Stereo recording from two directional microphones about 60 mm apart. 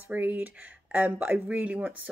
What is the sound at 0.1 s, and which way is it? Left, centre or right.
Speech, right.